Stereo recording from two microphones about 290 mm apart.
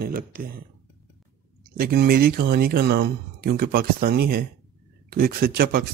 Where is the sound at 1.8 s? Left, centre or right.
Right.